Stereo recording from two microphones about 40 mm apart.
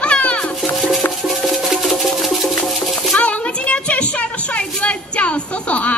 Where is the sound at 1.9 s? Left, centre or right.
Centre.